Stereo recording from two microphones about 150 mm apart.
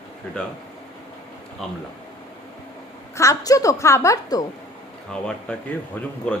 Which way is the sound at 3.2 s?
20° left (ahead or behind).